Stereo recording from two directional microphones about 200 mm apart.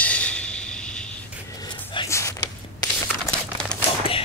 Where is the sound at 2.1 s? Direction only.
15° left (ahead or behind).